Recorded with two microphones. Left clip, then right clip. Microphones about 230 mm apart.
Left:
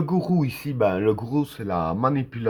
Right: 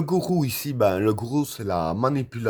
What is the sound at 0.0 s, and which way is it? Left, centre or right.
Speech, right.